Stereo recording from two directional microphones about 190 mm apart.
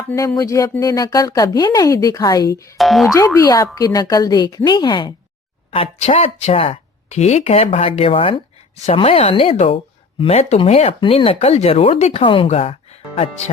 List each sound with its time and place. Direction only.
0.1 s speech: 10° left (ahead or behind)
2.7 s speech: centre (ahead or behind)
3.2 s a woman's voice: 15° left (ahead or behind); by 13.3 s 30° left (ahead or behind)